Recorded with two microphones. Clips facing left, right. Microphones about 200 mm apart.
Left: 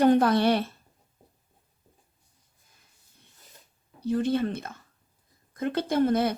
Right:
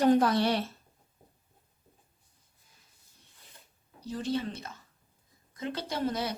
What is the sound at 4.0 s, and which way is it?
Speech, 60° left (ahead or behind).